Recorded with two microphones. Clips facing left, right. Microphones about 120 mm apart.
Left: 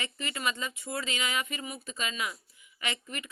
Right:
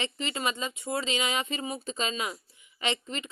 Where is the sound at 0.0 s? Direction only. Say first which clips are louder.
Right 3 dB; 25° right (ahead or behind).